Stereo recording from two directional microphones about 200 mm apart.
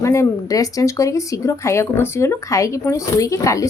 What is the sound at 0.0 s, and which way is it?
A woman's voice, 15° left (ahead or behind).